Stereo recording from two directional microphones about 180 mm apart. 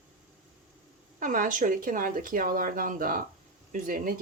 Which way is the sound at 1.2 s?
45° right (ahead or behind).